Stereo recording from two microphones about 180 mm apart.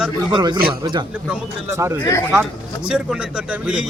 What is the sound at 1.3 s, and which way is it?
A man's voice, 10° right (ahead or behind).